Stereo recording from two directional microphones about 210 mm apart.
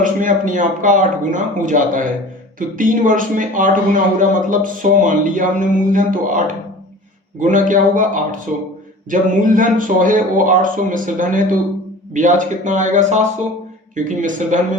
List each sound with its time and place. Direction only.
0.0 s a man's voice: 40° right (ahead or behind)